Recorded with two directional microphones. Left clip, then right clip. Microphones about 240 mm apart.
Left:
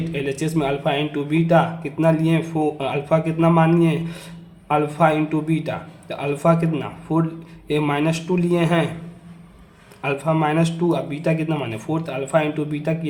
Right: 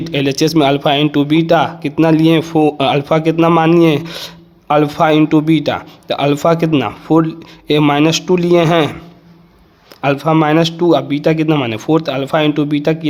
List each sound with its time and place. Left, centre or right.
0.1 s speech: right
10.0 s speech: right